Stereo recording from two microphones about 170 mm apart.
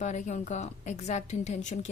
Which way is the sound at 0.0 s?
45° left (ahead or behind).